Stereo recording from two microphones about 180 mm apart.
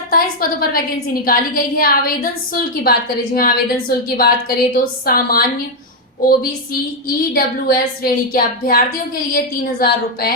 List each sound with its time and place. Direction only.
0.1 s a woman's voice: 55° left (ahead or behind)
7.3 s a woman's voice: 55° left (ahead or behind)